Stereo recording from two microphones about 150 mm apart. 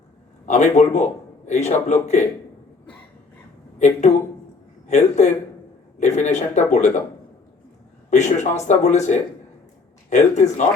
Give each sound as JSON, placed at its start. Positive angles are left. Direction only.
{"t": 0.4, "sound": "speech", "side_deg": 50}
{"t": 3.8, "sound": "speech", "side_deg": 50}
{"t": 8.1, "sound": "speech", "side_deg": 50}